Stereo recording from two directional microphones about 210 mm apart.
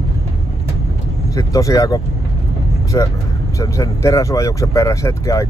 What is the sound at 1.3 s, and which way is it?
Speech, 15° left (ahead or behind).